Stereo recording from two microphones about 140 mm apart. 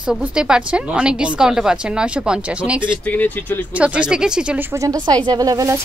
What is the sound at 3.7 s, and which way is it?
Speech, 10° right (ahead or behind).